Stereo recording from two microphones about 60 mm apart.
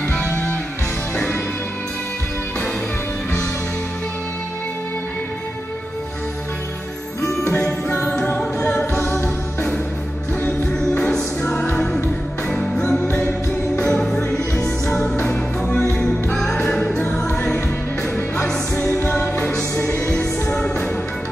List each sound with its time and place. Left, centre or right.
0.1 s music: centre
7.9 s music: left
8.4 s music: centre
10.7 s music: centre
19.0 s music: centre